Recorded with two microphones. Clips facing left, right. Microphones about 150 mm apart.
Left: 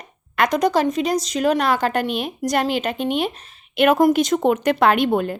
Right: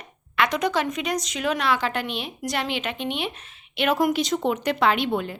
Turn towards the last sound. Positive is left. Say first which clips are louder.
# left 5 dB
turn(degrees=50)  # may be behind; listen again after turning